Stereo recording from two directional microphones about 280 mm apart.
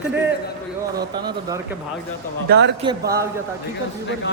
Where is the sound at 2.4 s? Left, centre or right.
Right.